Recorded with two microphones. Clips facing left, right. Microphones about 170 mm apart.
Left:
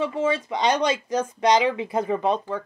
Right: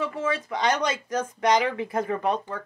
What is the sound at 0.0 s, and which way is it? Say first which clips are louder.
Speech: left 4 dB; 25° left (ahead or behind).